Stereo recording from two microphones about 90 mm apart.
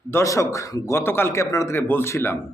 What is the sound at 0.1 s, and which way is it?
A man's voice, 35° left (ahead or behind).